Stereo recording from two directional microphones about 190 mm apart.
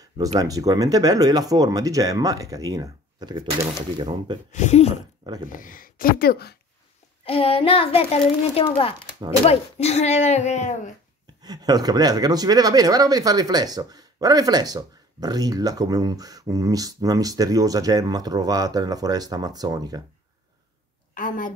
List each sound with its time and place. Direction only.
0.2 s speech: 20° right (ahead or behind)
4.5 s speech: 40° left (ahead or behind)
5.5 s speech: 45° left (ahead or behind)
7.2 s a child's voice: 30° left (ahead or behind)
11.4 s speech: 20° right (ahead or behind)
21.1 s a woman's voice: 45° left (ahead or behind)